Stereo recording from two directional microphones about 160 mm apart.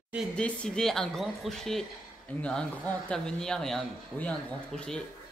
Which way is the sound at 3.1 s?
5° left (ahead or behind).